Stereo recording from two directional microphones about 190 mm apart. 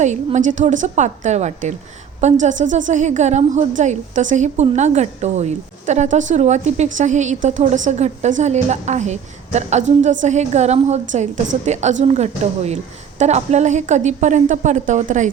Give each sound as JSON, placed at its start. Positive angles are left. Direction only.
{"t": 0.0, "sound": "a woman's voice", "side_deg": -40}